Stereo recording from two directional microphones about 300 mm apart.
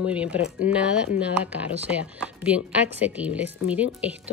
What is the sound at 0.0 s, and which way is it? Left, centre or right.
Speech, centre.